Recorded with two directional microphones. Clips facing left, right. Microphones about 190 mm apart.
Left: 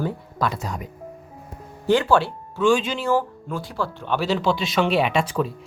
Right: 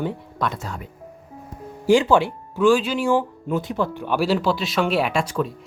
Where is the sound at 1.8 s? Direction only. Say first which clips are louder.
Right 2 dB; 15° right (ahead or behind).